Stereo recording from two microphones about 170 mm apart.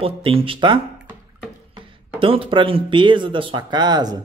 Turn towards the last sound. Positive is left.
turn(degrees=-25)  # may be behind; listen again after turning